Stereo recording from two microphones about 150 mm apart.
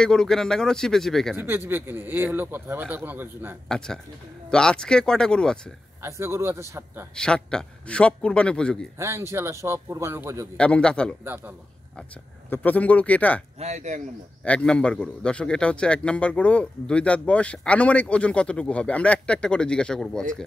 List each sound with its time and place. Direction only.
0.0 s a man's voice: 5° left (ahead or behind)
1.3 s speech: 15° right (ahead or behind)
3.6 s a man's voice: 5° left (ahead or behind)
6.0 s speech: 15° right (ahead or behind)
7.2 s a man's voice: 5° left (ahead or behind)
8.9 s speech: 20° right (ahead or behind)
10.6 s a man's voice: 5° left (ahead or behind)
11.2 s speech: 15° right (ahead or behind)
12.4 s a man's voice: 10° left (ahead or behind)
13.6 s speech: 50° right (ahead or behind)
14.4 s a man's voice: 5° left (ahead or behind)